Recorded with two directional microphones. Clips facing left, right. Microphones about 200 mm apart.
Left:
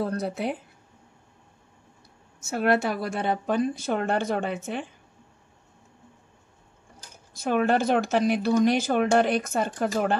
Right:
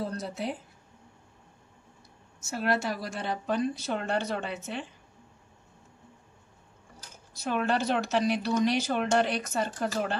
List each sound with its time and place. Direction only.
0.0 s speech: 60° left (ahead or behind)
2.4 s speech: 60° left (ahead or behind)
7.3 s speech: 50° left (ahead or behind)